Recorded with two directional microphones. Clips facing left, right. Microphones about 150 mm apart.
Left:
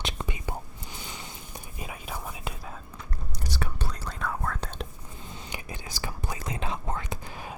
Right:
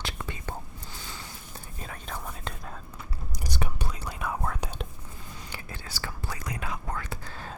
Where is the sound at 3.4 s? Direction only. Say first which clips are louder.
Even; 15° right (ahead or behind).